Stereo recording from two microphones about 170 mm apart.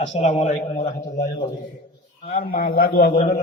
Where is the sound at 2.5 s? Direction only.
60° left (ahead or behind).